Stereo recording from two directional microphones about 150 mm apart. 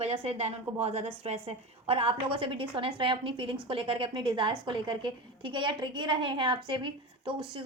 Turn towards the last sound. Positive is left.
turn(degrees=-35)  # may be behind; listen again after turning